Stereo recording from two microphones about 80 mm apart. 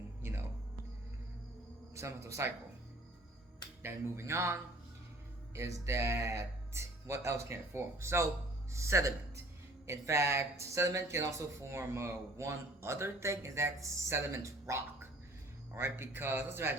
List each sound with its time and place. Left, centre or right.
0.2 s music: right
2.0 s speech: right
3.8 s speech: right
5.5 s speech: right